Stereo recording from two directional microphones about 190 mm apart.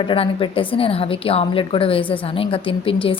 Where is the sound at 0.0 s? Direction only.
25° left (ahead or behind).